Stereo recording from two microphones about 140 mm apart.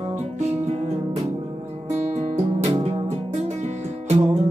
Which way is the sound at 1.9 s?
50° right (ahead or behind).